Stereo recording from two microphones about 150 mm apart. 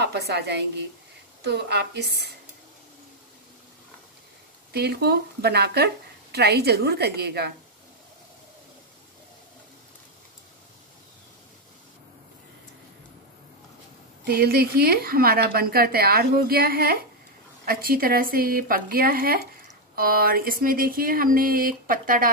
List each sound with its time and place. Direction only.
0.0 s speech: 90° right
4.7 s speech: 90° right
14.2 s speech: 90° right
17.6 s a sound: 75° right (ahead or behind)